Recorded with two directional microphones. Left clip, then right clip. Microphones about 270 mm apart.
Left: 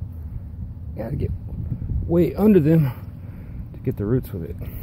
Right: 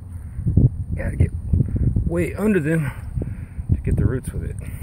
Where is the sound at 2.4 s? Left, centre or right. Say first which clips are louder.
Left 3 dB; centre.